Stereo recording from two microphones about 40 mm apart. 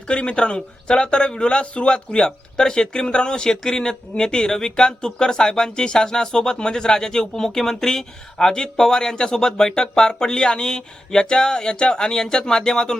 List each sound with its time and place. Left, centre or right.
0.1 s a man's voice: left